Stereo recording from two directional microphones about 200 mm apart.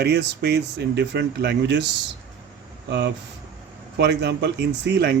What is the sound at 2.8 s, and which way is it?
Speech, 60° right (ahead or behind).